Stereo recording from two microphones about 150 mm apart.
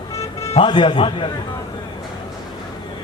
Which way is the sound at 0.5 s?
35° left (ahead or behind).